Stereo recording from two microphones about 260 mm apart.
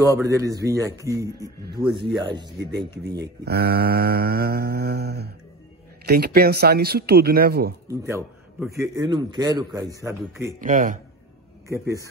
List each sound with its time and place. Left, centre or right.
0.0 s a man's voice: centre
3.2 s speech: right
7.9 s a man's voice: centre
10.6 s speech: right
11.7 s a man's voice: centre